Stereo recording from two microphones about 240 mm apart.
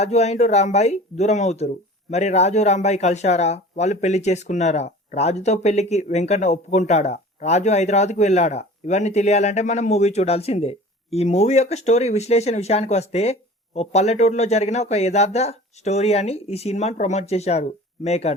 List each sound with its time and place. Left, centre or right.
0.0 s speech: left